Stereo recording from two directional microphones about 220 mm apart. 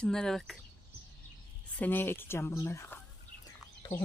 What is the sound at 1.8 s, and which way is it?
Speech, 10° left (ahead or behind).